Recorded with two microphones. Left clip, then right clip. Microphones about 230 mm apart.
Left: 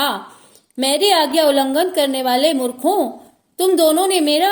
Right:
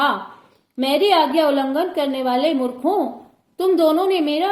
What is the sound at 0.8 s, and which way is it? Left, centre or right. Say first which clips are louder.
A woman's voice: left 1 dB; left.